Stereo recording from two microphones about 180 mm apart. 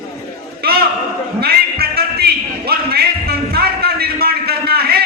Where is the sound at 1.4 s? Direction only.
60° right (ahead or behind).